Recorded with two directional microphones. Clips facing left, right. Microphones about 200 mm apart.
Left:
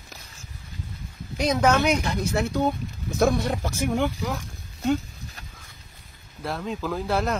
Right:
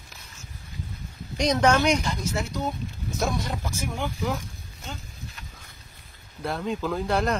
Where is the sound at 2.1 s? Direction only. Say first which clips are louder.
Left 4 dB; 60° left (ahead or behind).